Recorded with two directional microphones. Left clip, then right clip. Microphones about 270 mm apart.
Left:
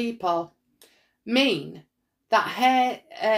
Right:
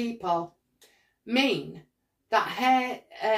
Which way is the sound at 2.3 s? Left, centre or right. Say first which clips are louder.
Left 3 dB; left.